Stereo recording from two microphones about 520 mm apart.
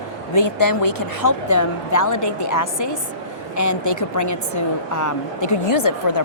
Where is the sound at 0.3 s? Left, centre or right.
Left.